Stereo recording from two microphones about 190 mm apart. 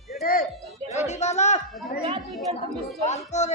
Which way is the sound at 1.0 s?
35° left (ahead or behind).